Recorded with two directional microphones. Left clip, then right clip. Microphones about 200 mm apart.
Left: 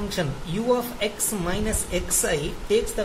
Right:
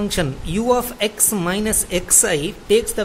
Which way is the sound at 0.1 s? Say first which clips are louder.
Right 6 dB; 45° right (ahead or behind).